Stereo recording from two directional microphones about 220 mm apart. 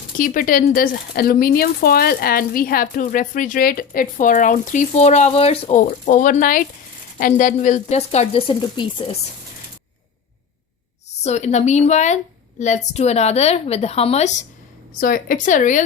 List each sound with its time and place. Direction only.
0.2 s speech: 40° left (ahead or behind); by 9.1 s 25° left (ahead or behind)
11.2 s speech: 30° left (ahead or behind)